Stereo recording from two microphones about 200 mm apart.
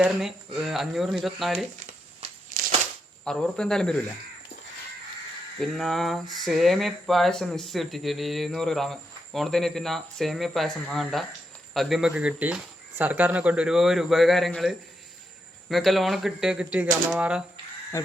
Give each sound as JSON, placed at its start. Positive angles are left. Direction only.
{"t": 0.0, "sound": "speech", "side_deg": 0}
{"t": 3.2, "sound": "speech", "side_deg": 5}
{"t": 5.5, "sound": "speech", "side_deg": 0}
{"t": 17.9, "sound": "speech", "side_deg": 15}